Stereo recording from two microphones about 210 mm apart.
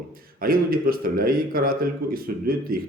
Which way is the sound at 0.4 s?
45° right (ahead or behind).